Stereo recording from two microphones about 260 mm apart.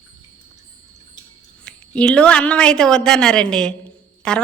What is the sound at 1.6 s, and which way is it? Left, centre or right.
A woman's voice, centre.